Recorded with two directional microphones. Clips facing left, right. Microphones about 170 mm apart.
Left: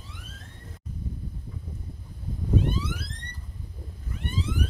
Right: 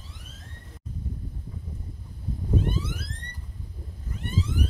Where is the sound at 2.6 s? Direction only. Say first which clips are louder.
Left 1 dB; 50° right (ahead or behind).